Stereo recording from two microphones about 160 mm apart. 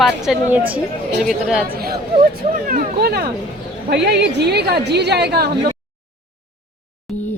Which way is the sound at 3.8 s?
90° right.